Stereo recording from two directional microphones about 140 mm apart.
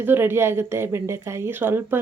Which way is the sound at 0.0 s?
15° right (ahead or behind).